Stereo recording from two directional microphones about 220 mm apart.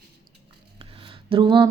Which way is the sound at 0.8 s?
25° right (ahead or behind).